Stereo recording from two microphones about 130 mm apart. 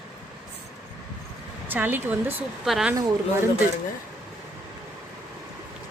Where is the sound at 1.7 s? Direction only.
15° right (ahead or behind).